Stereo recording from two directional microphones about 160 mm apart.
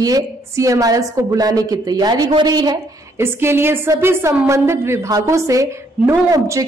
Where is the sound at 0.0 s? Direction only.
20° right (ahead or behind).